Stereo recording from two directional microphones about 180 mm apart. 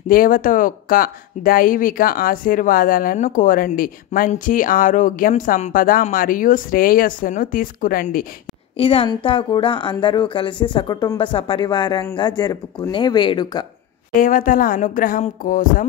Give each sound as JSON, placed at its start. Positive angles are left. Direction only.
{"t": 0.1, "sound": "speech", "side_deg": 50}
{"t": 8.7, "sound": "a woman's voice", "side_deg": 30}
{"t": 14.1, "sound": "speech", "side_deg": 50}